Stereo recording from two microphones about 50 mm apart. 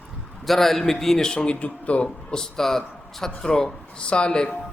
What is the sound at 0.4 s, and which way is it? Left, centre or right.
A man's voice, centre.